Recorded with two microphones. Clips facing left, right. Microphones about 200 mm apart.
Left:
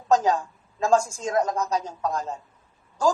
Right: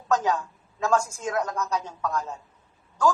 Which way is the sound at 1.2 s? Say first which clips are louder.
Left 4 dB; 35° left (ahead or behind).